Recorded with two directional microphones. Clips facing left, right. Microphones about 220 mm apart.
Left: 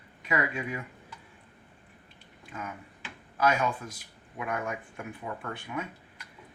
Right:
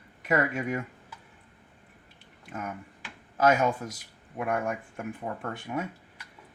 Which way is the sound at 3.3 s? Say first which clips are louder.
Right 4 dB; 45° right (ahead or behind).